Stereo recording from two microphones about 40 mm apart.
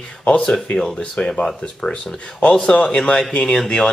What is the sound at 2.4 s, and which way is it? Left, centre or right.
Speech, left.